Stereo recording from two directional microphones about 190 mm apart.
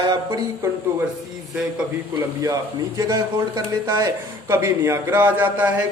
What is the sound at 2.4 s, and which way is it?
Speech, 20° right (ahead or behind).